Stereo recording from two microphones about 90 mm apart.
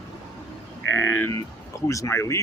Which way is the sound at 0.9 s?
35° left (ahead or behind).